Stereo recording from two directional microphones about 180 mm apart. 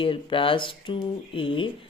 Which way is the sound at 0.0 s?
30° left (ahead or behind).